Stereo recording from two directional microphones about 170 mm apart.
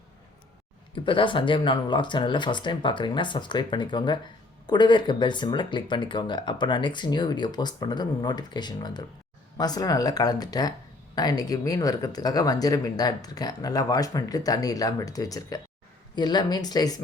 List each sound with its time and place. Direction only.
0.9 s speech: 30° left (ahead or behind)